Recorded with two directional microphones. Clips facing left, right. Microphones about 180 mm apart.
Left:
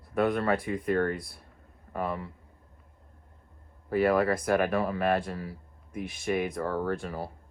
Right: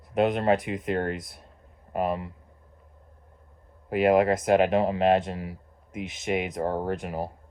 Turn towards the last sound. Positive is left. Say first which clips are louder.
# right 2 dB
turn(degrees=-15)  # may be behind; listen again after turning